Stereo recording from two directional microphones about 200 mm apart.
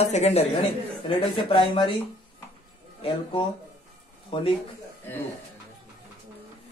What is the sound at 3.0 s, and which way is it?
Speech, 25° left (ahead or behind).